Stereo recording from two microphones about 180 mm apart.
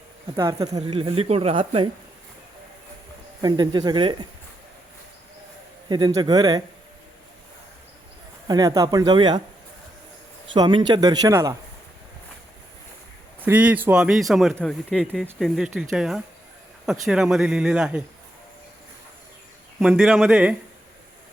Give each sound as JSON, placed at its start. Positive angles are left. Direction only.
{"t": 0.3, "sound": "a man's voice", "side_deg": -20}
{"t": 0.9, "sound": "speech", "side_deg": -30}
{"t": 3.4, "sound": "a man's voice", "side_deg": -25}
{"t": 5.9, "sound": "a man's voice", "side_deg": -20}
{"t": 8.4, "sound": "a man's voice", "side_deg": -20}
{"t": 10.5, "sound": "a man's voice", "side_deg": -25}
{"t": 13.4, "sound": "speech", "side_deg": -10}
{"t": 19.8, "sound": "speech", "side_deg": -5}